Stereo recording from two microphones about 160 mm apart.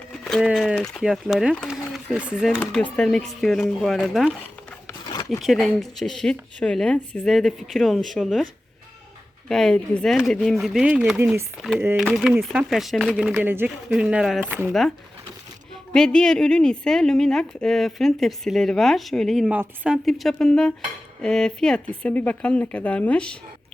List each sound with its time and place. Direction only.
0.1 s a woman's voice: centre (ahead or behind)
2.6 s a woman's voice: 10° left (ahead or behind)
5.0 s zipper: 25° left (ahead or behind)
5.4 s a woman's voice: centre (ahead or behind)
9.5 s a woman's voice: 5° left (ahead or behind)
13.3 s speech: 15° right (ahead or behind)
14.7 s a woman's voice: centre (ahead or behind)